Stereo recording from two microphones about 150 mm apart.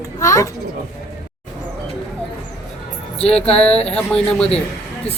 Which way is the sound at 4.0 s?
5° left (ahead or behind).